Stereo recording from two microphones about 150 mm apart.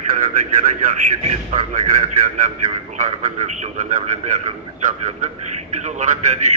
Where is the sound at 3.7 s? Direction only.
55° right (ahead or behind).